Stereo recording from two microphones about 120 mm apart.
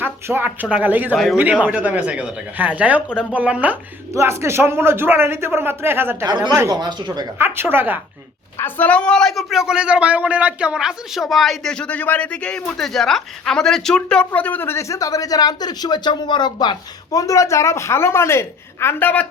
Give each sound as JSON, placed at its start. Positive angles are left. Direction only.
{"t": 0.0, "sound": "speech", "side_deg": -15}
{"t": 1.1, "sound": "a man's voice", "side_deg": 0}
{"t": 1.4, "sound": "a woman's voice", "side_deg": -10}
{"t": 4.1, "sound": "a man's voice", "side_deg": -25}
{"t": 6.2, "sound": "speech", "side_deg": -35}
{"t": 7.3, "sound": "a man's voice", "side_deg": -20}
{"t": 8.5, "sound": "a man's voice", "side_deg": 15}